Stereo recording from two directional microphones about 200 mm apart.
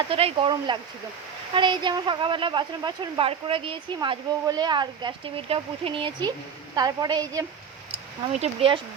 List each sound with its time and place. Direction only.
0.1 s speech: 30° right (ahead or behind)
7.9 s speech: 30° right (ahead or behind)